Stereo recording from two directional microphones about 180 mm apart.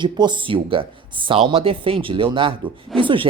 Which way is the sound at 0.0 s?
25° right (ahead or behind).